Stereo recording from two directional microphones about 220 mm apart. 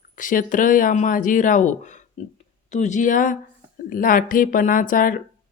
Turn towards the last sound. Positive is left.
turn(degrees=40)  # may be behind; listen again after turning